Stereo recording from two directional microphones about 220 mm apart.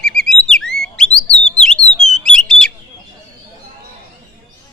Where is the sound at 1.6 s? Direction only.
Centre (ahead or behind).